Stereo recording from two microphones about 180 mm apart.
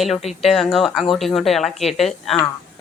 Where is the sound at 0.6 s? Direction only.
Centre (ahead or behind).